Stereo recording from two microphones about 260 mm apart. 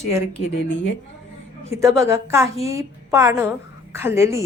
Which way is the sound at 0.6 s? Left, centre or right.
Left.